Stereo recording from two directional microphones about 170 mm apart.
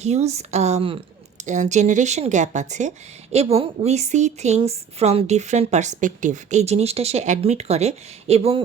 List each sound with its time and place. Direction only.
0.0 s a woman's voice: 40° right (ahead or behind)
3.3 s a woman's voice: 35° right (ahead or behind)